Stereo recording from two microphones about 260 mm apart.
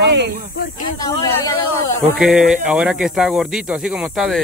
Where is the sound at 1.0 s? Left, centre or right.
Centre.